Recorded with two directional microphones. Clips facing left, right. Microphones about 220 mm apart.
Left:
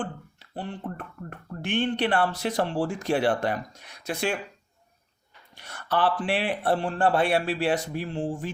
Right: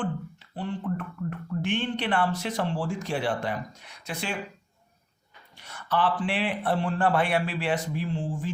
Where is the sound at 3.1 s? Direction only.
65° left (ahead or behind).